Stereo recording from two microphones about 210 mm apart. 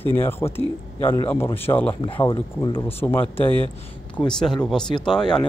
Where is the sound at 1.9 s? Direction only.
25° left (ahead or behind).